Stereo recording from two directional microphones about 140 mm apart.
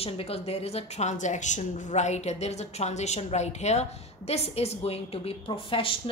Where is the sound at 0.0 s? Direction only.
45° left (ahead or behind).